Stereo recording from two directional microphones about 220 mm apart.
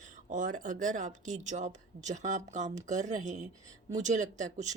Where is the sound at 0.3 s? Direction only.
35° right (ahead or behind).